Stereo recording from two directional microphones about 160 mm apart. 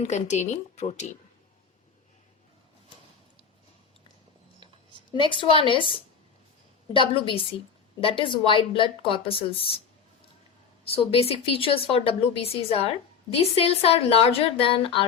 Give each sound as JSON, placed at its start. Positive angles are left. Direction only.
{"t": 0.0, "sound": "speech", "side_deg": 45}
{"t": 5.1, "sound": "a woman's voice", "side_deg": 30}
{"t": 6.9, "sound": "a woman's voice", "side_deg": 35}
{"t": 10.8, "sound": "a woman's voice", "side_deg": 35}